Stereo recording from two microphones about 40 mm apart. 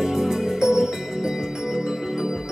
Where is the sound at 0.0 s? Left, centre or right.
Centre.